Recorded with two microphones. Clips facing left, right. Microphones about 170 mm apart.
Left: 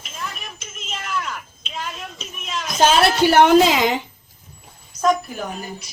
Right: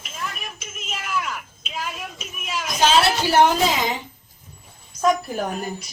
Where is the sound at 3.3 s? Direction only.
70° left (ahead or behind).